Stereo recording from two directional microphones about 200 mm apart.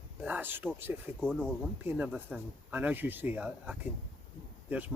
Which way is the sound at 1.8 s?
10° right (ahead or behind).